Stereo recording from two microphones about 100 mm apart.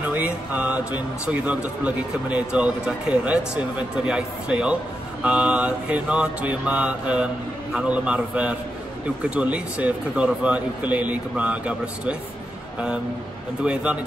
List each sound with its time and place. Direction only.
0.0 s mantra: 15° right (ahead or behind)
1.2 s speech: 15° right (ahead or behind)
13.6 s speech: 10° right (ahead or behind)